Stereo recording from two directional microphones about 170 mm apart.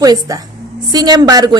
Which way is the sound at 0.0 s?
20° right (ahead or behind).